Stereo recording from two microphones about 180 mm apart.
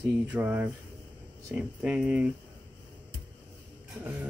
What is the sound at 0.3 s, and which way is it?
Speech, 10° right (ahead or behind).